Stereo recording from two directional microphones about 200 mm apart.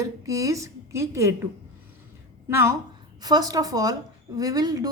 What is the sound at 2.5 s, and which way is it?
A woman's voice, 15° right (ahead or behind).